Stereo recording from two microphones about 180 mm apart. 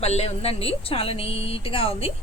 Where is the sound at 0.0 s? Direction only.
35° left (ahead or behind).